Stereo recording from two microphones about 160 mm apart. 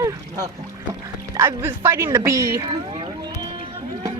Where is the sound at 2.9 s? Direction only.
35° right (ahead or behind).